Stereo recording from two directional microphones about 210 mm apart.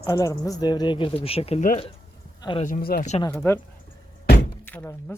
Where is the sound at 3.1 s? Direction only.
25° left (ahead or behind).